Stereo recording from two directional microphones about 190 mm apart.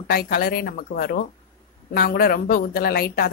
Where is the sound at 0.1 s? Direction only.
55° left (ahead or behind).